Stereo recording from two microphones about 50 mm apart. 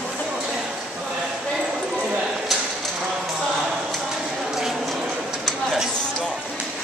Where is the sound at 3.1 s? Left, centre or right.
Centre.